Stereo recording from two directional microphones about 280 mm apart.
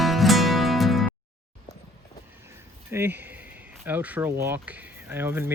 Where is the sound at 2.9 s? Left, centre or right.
Centre.